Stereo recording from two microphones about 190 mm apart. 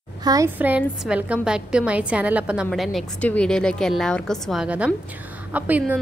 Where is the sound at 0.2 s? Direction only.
20° right (ahead or behind).